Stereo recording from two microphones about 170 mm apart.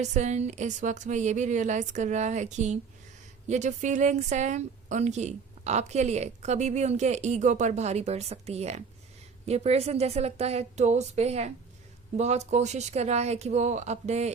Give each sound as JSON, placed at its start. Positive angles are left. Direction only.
{"t": 0.0, "sound": "a woman's voice", "side_deg": -45}